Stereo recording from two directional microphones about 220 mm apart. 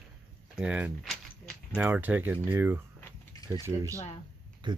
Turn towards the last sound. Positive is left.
turn(degrees=-20)  # may be behind; listen again after turning